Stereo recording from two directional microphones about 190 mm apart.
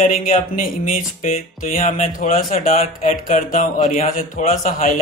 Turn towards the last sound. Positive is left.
turn(degrees=45)  # may be behind; listen again after turning